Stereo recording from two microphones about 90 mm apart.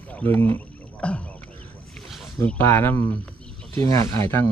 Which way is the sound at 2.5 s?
25° left (ahead or behind).